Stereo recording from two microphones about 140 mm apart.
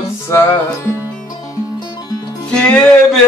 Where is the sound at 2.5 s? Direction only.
5° left (ahead or behind).